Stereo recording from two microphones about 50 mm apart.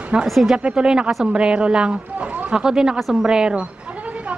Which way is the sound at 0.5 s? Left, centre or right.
Centre.